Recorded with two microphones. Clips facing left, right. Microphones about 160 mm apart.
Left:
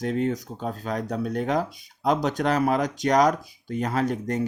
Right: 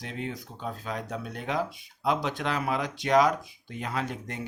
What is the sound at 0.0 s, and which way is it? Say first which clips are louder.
Speech: left 11 dB; 45° left (ahead or behind).